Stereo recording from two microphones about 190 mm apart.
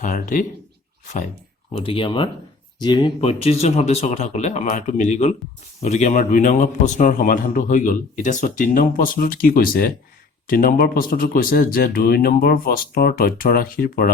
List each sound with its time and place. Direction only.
0.0 s a man's voice: 45° left (ahead or behind)
1.7 s a man's voice: 30° left (ahead or behind); by 14.1 s 50° left (ahead or behind)